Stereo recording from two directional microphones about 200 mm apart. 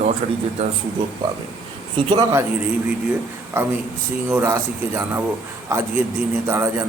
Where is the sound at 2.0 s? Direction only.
20° right (ahead or behind).